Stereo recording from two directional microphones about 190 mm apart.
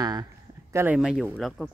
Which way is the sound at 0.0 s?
20° right (ahead or behind).